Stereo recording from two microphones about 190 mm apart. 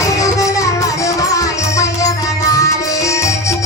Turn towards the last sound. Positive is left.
turn(degrees=15)  # may be behind; listen again after turning